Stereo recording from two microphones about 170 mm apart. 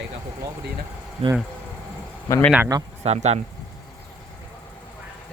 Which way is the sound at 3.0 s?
40° right (ahead or behind).